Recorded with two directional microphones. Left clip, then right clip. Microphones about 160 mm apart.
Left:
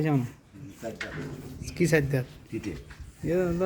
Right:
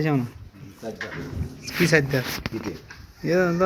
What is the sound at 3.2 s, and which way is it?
Speech, 5° left (ahead or behind).